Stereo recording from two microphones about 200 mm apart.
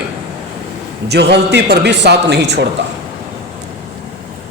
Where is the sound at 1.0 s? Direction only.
55° right (ahead or behind).